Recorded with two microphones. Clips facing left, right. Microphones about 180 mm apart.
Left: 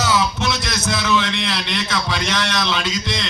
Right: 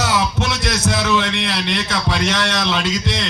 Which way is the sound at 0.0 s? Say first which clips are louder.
Even; 65° right (ahead or behind).